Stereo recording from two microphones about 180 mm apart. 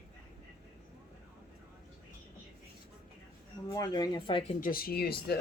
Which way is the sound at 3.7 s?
20° left (ahead or behind).